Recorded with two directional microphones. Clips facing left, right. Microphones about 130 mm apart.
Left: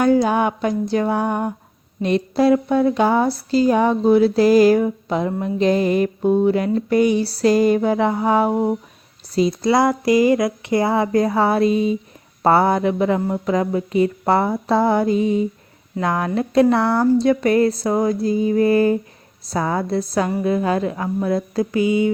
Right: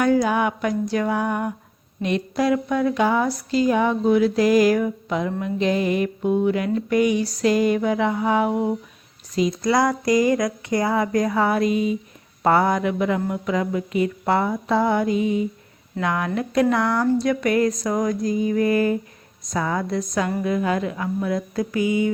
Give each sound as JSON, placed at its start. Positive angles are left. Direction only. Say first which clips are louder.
{"t": 0.0, "sound": "speech", "louder": "left 3 dB", "side_deg": 30}